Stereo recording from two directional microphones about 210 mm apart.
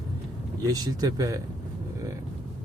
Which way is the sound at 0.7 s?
20° right (ahead or behind).